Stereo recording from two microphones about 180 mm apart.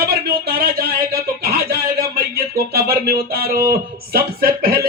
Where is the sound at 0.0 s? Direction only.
60° right (ahead or behind).